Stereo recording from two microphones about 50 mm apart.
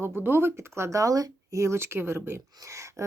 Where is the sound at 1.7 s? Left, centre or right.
Right.